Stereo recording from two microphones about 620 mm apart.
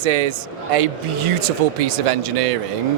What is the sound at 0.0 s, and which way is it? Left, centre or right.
Speech, right.